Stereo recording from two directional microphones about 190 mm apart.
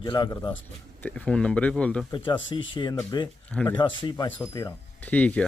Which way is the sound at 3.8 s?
25° left (ahead or behind).